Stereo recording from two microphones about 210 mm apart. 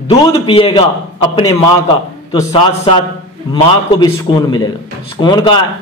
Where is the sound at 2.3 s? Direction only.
20° left (ahead or behind).